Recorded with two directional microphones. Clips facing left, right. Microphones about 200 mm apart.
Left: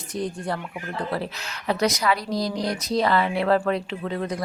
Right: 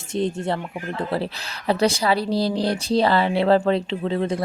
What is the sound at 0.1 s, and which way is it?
Speech, 25° right (ahead or behind).